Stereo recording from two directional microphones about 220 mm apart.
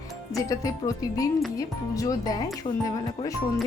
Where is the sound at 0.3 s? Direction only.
15° left (ahead or behind).